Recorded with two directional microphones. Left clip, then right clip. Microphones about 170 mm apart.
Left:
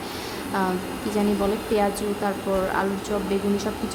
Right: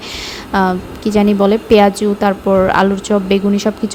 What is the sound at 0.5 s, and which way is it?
A woman's voice, 45° right (ahead or behind).